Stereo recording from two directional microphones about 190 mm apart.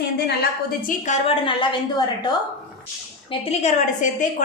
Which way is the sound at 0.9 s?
40° left (ahead or behind).